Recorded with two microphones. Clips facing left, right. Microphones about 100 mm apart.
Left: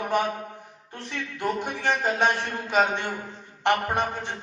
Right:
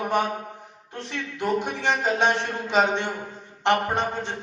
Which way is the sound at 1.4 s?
15° right (ahead or behind).